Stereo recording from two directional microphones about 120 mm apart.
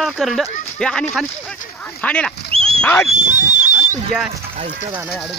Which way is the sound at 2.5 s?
55° right (ahead or behind).